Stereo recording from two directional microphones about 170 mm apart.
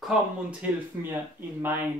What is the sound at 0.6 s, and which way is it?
Speech, 10° right (ahead or behind).